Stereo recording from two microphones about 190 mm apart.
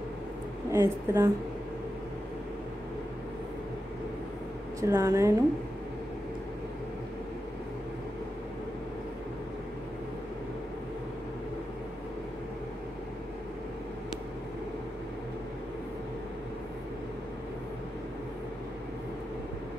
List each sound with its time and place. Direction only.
0.7 s a woman's voice: 15° right (ahead or behind)
4.7 s a woman's voice: 15° right (ahead or behind)